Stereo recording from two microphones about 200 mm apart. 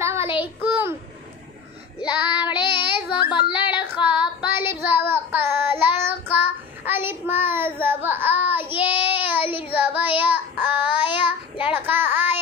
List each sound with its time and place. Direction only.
0.0 s child singing: 15° right (ahead or behind)
2.0 s child singing: 10° right (ahead or behind)
2.5 s child singing: 25° left (ahead or behind)
3.5 s female singing: 25° left (ahead or behind)
3.8 s child singing: 5° right (ahead or behind)